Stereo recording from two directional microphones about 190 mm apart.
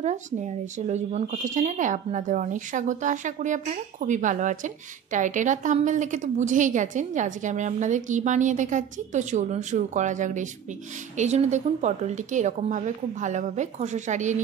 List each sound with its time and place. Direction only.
0.0 s speech: 40° right (ahead or behind)